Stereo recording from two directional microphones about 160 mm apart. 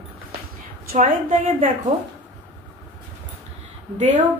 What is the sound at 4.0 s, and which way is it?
Speech, 50° right (ahead or behind).